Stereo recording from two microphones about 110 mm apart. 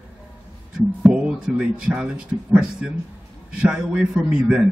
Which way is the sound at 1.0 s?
10° right (ahead or behind).